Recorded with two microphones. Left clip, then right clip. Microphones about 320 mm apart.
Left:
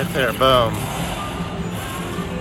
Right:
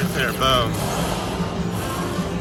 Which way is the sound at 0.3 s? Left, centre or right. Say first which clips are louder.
Left 4 dB; centre.